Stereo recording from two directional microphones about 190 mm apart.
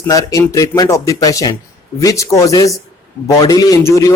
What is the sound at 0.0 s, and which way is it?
A man's voice, 20° left (ahead or behind).